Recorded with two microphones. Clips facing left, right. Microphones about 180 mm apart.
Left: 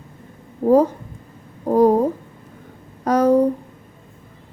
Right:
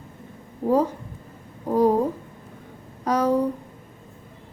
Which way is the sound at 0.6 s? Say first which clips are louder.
Left 6 dB; 45° left (ahead or behind).